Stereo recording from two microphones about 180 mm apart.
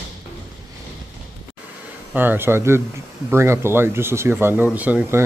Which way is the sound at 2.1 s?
10° right (ahead or behind).